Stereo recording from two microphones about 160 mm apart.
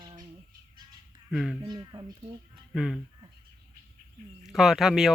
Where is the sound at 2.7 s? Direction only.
Centre (ahead or behind).